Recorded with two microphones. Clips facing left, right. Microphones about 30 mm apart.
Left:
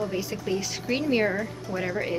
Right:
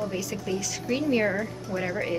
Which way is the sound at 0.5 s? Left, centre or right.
Left.